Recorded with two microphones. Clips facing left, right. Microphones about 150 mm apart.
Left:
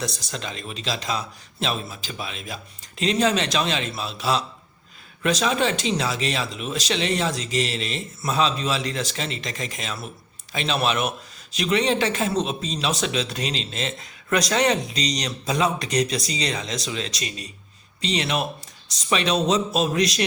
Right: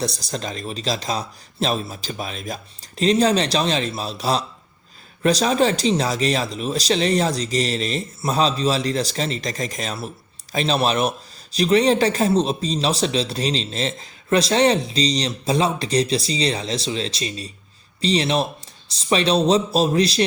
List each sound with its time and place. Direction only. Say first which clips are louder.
0.0 s a man's voice: right 4 dB; 35° right (ahead or behind)